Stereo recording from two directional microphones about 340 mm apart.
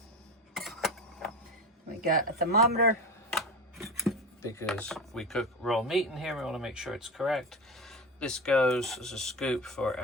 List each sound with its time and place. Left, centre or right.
0.5 s a sound: centre
2.0 s speech: right
3.2 s speech: centre